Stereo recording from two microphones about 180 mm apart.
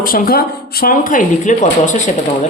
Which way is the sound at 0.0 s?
55° left (ahead or behind).